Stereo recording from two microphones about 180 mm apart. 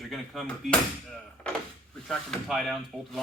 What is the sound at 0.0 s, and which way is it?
Speech, centre (ahead or behind).